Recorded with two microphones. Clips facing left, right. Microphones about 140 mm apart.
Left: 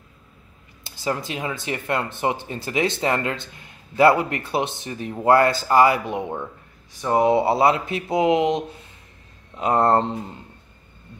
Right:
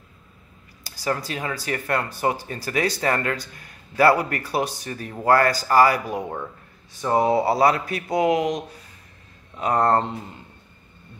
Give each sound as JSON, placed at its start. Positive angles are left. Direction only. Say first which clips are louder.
{"t": 0.8, "sound": "speech", "louder": "even", "side_deg": 20}